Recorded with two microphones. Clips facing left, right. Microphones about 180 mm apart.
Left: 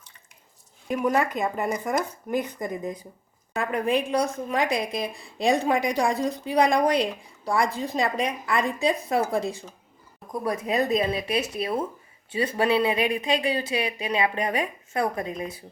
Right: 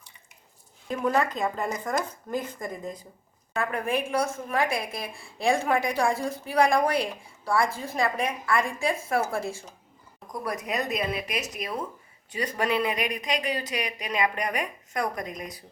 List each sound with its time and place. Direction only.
0.9 s a woman's voice: 15° left (ahead or behind)